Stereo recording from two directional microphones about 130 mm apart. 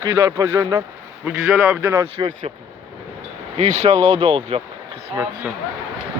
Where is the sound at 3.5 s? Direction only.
60° right (ahead or behind).